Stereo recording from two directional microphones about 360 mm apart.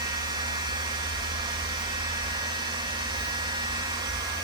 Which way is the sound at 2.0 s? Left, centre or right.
Centre.